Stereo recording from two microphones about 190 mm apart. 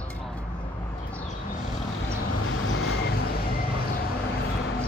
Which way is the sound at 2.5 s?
80° left.